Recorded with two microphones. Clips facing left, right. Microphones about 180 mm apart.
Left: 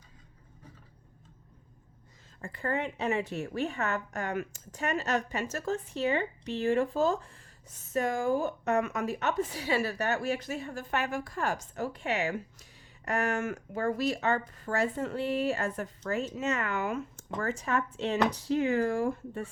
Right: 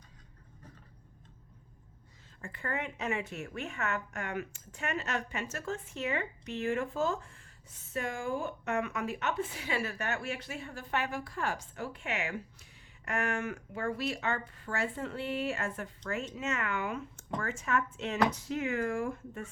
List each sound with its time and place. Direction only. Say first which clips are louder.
2.4 s speech: left 5 dB; 35° left (ahead or behind)